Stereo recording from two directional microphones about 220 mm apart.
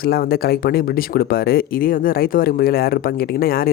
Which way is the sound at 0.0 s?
45° left (ahead or behind).